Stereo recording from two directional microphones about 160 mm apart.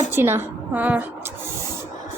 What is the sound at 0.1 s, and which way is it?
Speech, 15° right (ahead or behind).